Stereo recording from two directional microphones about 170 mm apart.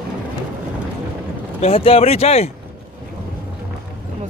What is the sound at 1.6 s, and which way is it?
Speech, 35° left (ahead or behind).